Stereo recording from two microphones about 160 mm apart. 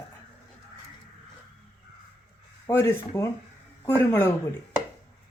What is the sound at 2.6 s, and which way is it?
A woman's voice, 15° left (ahead or behind).